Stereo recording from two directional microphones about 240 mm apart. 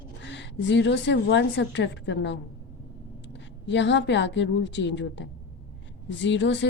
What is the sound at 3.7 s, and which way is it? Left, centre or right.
A woman's voice, left.